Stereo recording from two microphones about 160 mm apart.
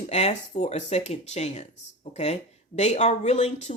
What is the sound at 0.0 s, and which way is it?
Speech, 40° left (ahead or behind).